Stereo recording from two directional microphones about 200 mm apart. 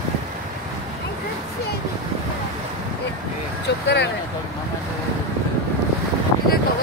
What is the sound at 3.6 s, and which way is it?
Speech, 60° left (ahead or behind).